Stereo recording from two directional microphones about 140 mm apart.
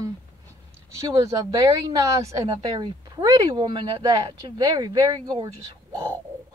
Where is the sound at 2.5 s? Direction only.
35° right (ahead or behind).